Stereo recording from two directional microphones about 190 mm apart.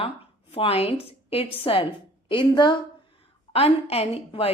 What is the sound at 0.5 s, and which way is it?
A woman's voice, 30° left (ahead or behind).